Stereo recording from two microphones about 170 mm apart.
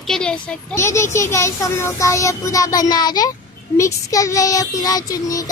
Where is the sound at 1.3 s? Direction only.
15° left (ahead or behind).